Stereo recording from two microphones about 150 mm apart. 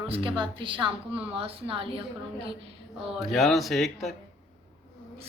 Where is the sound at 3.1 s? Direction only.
Centre (ahead or behind).